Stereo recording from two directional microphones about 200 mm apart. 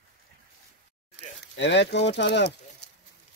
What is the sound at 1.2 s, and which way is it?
Speech, 60° left (ahead or behind).